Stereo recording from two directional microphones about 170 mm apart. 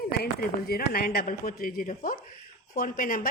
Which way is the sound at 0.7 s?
65° left (ahead or behind).